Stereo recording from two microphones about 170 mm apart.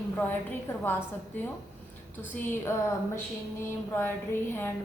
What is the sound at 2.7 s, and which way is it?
Speech, 15° left (ahead or behind).